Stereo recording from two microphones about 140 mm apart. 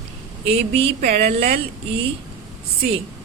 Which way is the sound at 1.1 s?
50° right (ahead or behind).